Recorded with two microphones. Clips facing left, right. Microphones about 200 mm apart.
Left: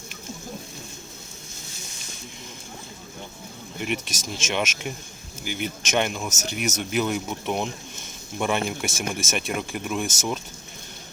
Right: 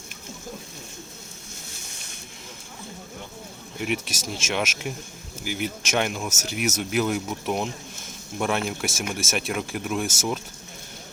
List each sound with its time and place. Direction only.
3.8 s speech: 5° right (ahead or behind)